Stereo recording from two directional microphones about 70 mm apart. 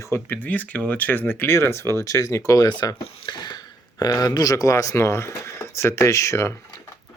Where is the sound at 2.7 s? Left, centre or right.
Left.